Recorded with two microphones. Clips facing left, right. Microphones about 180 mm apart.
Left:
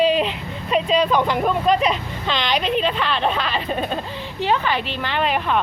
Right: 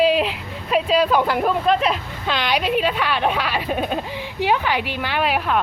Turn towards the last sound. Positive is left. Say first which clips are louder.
# even
turn(degrees=-5)  # may be behind; listen again after turning